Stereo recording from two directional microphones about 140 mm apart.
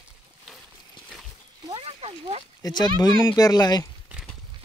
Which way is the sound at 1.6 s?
40° right (ahead or behind).